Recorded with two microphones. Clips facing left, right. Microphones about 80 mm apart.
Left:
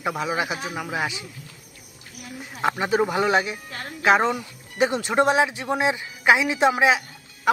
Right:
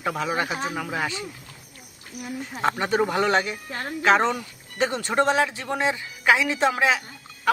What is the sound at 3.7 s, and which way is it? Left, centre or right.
Speech, right.